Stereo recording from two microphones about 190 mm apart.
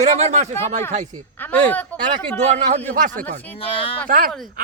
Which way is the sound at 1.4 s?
10° left (ahead or behind).